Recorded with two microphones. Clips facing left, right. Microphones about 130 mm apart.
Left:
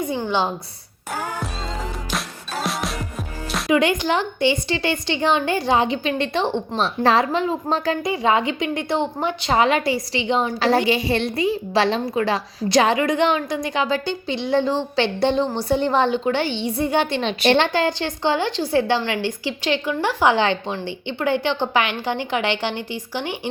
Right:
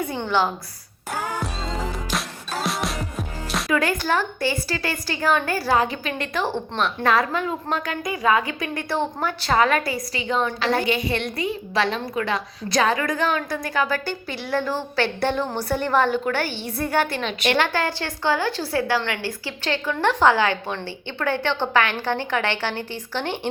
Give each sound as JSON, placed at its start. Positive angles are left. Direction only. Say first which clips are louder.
{"t": 0.3, "sound": "a woman's voice", "louder": "right 2 dB", "side_deg": 20}
{"t": 2.0, "sound": "music", "louder": "even", "side_deg": 0}
{"t": 3.7, "sound": "a woman's voice", "louder": "left 4 dB", "side_deg": 20}
{"t": 17.7, "sound": "a woman's voice", "louder": "left 4 dB", "side_deg": 20}
{"t": 20.3, "sound": "a woman's voice", "louder": "left 2 dB", "side_deg": 25}